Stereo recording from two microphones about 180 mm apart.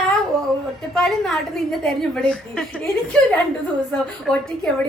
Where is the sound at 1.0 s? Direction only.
Centre (ahead or behind).